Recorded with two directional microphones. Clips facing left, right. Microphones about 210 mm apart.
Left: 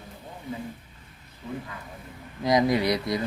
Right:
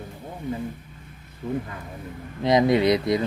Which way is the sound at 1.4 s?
50° right (ahead or behind).